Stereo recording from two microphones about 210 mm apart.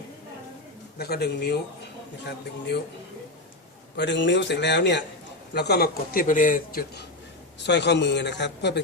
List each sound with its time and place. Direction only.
0.9 s a man's voice: 50° left (ahead or behind)
3.9 s a man's voice: 55° left (ahead or behind)
7.6 s a man's voice: 55° left (ahead or behind)